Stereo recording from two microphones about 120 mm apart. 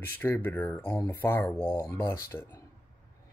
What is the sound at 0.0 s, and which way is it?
Speech, 20° left (ahead or behind).